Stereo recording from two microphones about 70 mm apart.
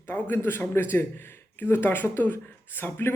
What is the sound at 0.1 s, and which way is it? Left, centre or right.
A man's voice, left.